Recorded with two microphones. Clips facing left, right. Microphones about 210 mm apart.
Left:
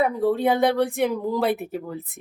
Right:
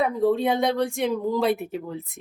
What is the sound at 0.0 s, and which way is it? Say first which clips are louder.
Speech: left 1 dB; 5° left (ahead or behind).